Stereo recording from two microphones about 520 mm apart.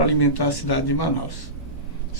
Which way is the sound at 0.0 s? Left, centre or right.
Left.